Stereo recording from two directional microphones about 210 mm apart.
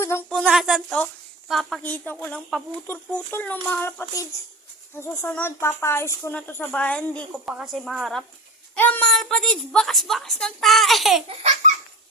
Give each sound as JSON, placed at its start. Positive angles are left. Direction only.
{"t": 0.0, "sound": "a woman's voice", "side_deg": 10}
{"t": 11.3, "sound": "baby laughter", "side_deg": -30}